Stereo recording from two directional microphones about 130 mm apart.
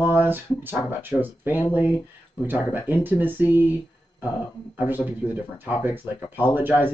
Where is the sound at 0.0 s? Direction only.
15° right (ahead or behind).